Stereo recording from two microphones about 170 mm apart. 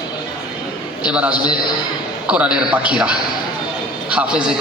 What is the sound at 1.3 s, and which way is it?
Speech, 25° left (ahead or behind).